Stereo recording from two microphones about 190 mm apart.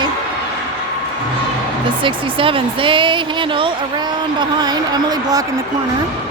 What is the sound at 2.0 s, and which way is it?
Speech, 25° right (ahead or behind).